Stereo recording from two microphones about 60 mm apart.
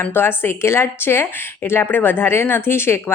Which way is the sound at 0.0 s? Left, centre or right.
Left.